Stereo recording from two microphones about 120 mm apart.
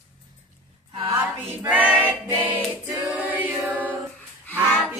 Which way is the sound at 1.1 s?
20° right (ahead or behind).